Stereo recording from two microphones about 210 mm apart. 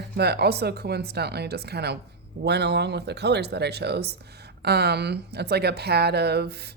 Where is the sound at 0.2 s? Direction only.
50° right (ahead or behind).